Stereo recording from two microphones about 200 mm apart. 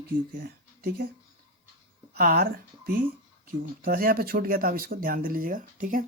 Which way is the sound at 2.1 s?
50° right (ahead or behind).